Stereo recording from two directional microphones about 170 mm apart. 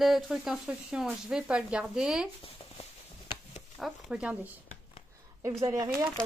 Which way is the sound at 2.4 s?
35° left (ahead or behind).